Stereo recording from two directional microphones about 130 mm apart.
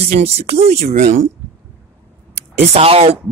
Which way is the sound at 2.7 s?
50° right (ahead or behind).